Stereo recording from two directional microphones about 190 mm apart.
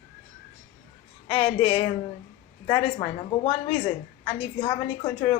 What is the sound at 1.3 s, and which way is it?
Speech, 30° left (ahead or behind).